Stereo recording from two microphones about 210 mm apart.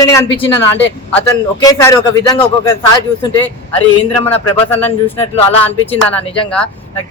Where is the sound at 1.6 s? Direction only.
15° left (ahead or behind).